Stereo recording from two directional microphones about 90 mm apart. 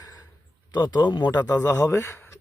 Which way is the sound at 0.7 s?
55° left (ahead or behind).